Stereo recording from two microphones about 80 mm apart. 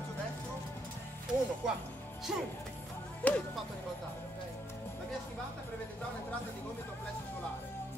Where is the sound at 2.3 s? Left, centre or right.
Centre.